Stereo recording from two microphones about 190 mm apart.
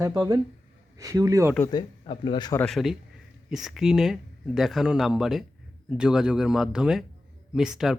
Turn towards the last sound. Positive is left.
turn(degrees=0)  # may be behind; listen again after turning